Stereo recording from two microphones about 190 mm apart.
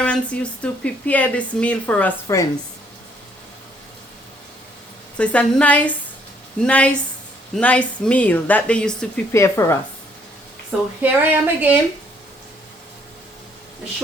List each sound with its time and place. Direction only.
0.0 s speech: 5° left (ahead or behind)
5.1 s speech: 5° left (ahead or behind)
9.3 s speech: 15° left (ahead or behind)
11.0 s speech: 10° right (ahead or behind)